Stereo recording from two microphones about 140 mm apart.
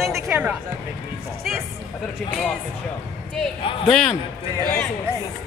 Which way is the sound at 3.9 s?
5° left (ahead or behind).